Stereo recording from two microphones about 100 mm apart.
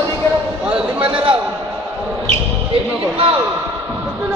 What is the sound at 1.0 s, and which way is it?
Speech, 65° right (ahead or behind).